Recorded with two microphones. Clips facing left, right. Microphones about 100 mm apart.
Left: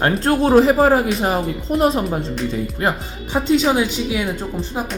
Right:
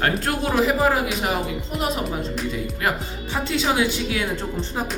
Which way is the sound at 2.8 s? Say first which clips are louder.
Left 2 dB; 25° left (ahead or behind).